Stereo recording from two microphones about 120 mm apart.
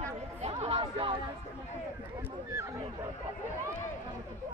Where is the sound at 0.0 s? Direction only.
65° right (ahead or behind).